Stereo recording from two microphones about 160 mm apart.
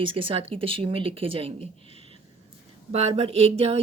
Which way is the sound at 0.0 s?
35° right (ahead or behind).